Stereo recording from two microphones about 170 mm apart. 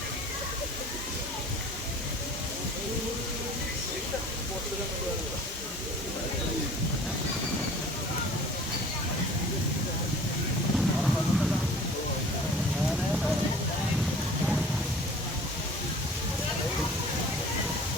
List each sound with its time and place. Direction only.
10.8 s vehicle: centre (ahead or behind)